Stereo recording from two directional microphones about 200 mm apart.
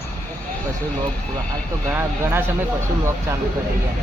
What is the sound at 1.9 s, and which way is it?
Speech, 10° right (ahead or behind).